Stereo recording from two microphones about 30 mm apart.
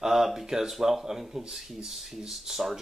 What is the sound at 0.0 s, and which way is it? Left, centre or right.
Speech, centre.